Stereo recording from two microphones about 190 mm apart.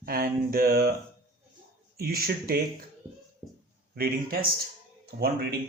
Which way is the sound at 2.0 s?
55° right (ahead or behind).